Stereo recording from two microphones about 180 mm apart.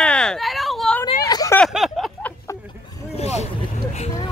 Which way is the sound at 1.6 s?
Centre (ahead or behind).